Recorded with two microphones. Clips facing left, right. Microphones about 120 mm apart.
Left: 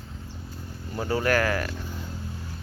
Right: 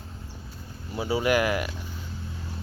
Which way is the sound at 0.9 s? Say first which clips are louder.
Even; 10° right (ahead or behind).